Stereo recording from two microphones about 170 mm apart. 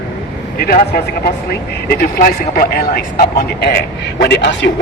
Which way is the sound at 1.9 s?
60° left (ahead or behind).